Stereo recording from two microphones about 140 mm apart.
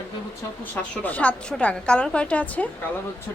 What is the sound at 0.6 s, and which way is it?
Speech, 10° left (ahead or behind).